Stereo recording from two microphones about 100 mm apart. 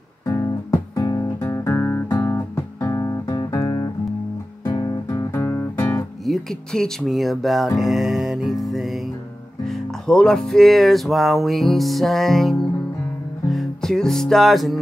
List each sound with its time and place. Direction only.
0.3 s music: 35° left (ahead or behind)
6.2 s speech: 5° left (ahead or behind)
9.7 s music: 5° left (ahead or behind)